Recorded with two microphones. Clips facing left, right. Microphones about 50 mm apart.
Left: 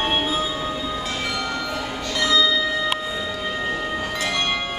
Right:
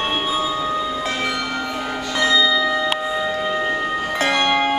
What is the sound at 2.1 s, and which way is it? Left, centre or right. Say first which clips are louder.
Bell: right 3 dB; centre.